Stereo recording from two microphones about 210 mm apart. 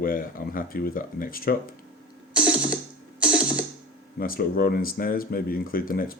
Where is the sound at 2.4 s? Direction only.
5° right (ahead or behind).